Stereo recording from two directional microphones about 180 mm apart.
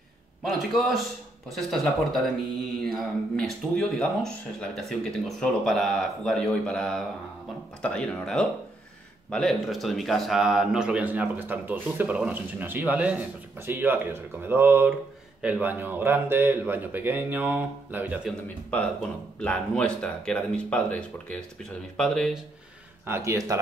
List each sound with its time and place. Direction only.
0.5 s a man's voice: centre (ahead or behind)
19.4 s speech: 5° left (ahead or behind)
23.0 s a man's voice: 15° right (ahead or behind)